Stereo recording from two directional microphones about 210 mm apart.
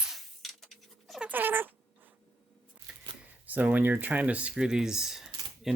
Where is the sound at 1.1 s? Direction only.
5° right (ahead or behind).